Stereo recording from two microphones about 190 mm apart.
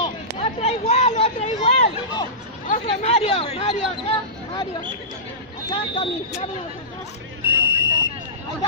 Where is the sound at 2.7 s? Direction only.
35° left (ahead or behind).